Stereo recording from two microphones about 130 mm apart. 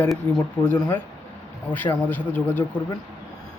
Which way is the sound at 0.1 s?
Centre (ahead or behind).